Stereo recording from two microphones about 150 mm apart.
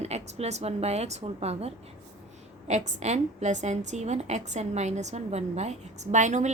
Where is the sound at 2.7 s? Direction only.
50° right (ahead or behind).